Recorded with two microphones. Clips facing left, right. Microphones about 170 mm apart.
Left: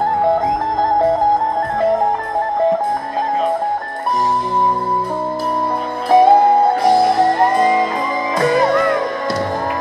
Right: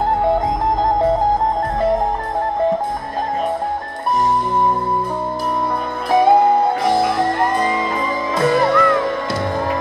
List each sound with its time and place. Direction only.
6.0 s music: 25° left (ahead or behind)